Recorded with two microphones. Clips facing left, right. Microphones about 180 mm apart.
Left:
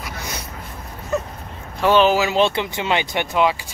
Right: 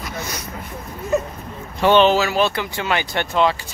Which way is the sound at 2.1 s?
20° left (ahead or behind).